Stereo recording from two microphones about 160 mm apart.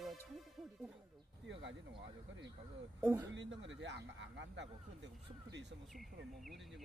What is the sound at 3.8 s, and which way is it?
Speech, 90° right.